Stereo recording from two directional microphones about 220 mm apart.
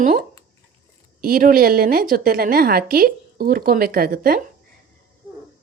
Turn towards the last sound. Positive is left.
turn(degrees=-40)  # may be behind; listen again after turning